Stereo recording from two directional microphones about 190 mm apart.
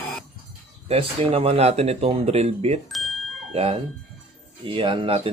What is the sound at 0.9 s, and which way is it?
Speech, 30° right (ahead or behind).